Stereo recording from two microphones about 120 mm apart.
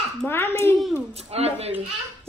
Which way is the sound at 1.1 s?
60° right (ahead or behind).